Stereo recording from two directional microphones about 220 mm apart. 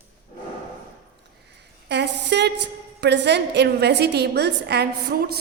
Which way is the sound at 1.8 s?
50° right (ahead or behind).